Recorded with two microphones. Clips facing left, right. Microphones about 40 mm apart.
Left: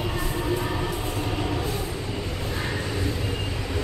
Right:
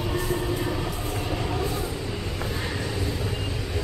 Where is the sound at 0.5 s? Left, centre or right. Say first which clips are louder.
Left 1 dB; left.